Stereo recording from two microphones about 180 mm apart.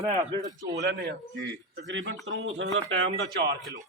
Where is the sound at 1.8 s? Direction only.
85° right.